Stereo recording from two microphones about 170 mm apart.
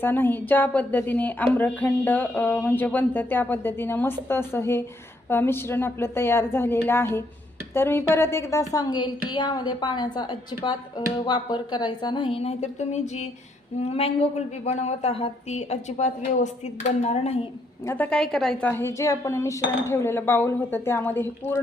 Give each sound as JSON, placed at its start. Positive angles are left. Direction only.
{"t": 0.0, "sound": "a woman's voice", "side_deg": 10}
{"t": 17.8, "sound": "a woman's voice", "side_deg": 10}
{"t": 18.7, "sound": "a woman's voice", "side_deg": 15}